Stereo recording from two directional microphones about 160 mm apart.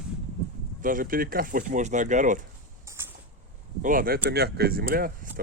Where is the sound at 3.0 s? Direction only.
15° right (ahead or behind).